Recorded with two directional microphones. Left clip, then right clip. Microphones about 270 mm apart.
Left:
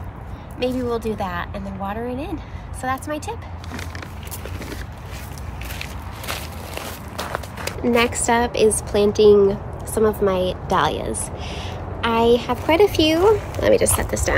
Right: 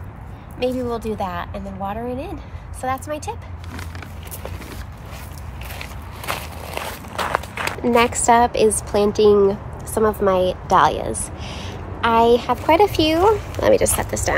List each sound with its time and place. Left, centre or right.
0.6 s a woman's voice: centre
5.7 s walk: right
7.8 s a woman's voice: centre